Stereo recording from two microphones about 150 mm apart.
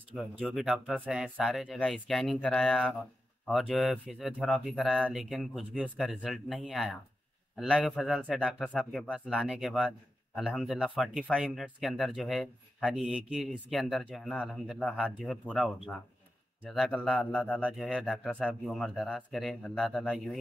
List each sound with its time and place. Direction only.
0.1 s speech: centre (ahead or behind)
8.6 s speech: 5° left (ahead or behind)
17.6 s speech: 5° right (ahead or behind)